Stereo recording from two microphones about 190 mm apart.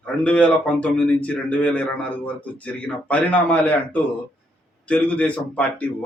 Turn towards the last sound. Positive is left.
turn(degrees=5)  # may be behind; listen again after turning